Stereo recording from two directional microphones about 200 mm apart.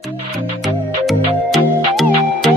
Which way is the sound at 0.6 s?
Centre (ahead or behind).